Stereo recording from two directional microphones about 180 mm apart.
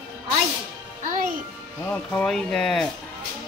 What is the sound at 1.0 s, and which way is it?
Music, 45° right (ahead or behind).